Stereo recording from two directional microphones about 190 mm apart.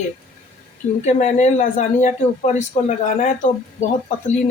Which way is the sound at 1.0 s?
40° left (ahead or behind).